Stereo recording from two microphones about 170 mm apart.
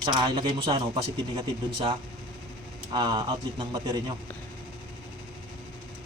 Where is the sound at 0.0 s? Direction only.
25° right (ahead or behind).